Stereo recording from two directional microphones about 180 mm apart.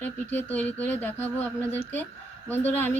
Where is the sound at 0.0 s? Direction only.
10° left (ahead or behind).